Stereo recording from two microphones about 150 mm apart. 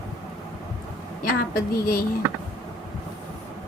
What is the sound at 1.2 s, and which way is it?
Speech, 75° left (ahead or behind).